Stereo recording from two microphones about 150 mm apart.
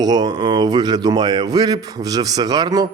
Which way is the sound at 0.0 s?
25° right (ahead or behind).